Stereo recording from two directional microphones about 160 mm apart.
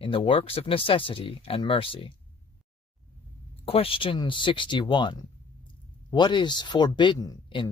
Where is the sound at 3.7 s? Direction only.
35° left (ahead or behind).